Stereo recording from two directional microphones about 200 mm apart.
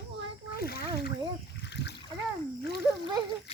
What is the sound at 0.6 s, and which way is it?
Speech, 50° left (ahead or behind).